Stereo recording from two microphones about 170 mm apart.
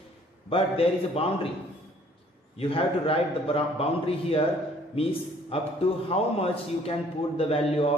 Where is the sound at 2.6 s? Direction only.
35° left (ahead or behind).